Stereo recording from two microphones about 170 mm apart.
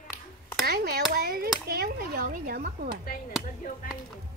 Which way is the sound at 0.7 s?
65° right (ahead or behind).